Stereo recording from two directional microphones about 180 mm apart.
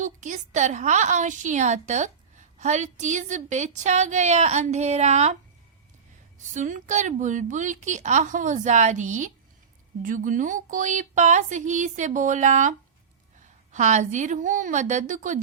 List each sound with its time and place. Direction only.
0.0 s a woman's voice: 45° right (ahead or behind)
6.5 s speech: 45° right (ahead or behind)